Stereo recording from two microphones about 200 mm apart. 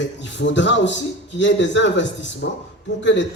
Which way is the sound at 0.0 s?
65° left (ahead or behind).